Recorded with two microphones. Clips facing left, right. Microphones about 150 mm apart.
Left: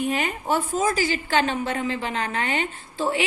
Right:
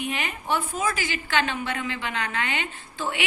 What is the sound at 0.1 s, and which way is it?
A woman's voice, 45° left (ahead or behind).